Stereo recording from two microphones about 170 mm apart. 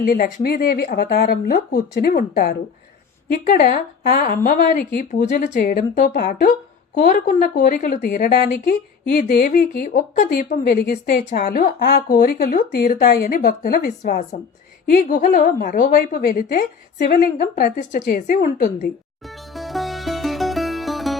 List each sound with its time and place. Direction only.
0.0 s a woman's voice: 60° left (ahead or behind)
19.3 s music: centre (ahead or behind)